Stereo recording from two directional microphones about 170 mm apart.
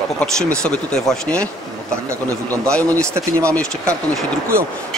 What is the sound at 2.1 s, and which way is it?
Speech, 15° right (ahead or behind).